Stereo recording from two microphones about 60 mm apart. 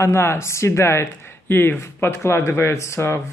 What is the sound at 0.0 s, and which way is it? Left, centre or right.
Speech, left.